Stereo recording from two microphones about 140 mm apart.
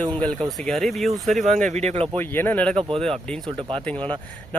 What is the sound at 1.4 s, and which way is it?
Speech, 60° right (ahead or behind).